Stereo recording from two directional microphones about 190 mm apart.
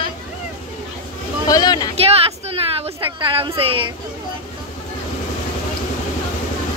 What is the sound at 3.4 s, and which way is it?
Speech, 30° right (ahead or behind).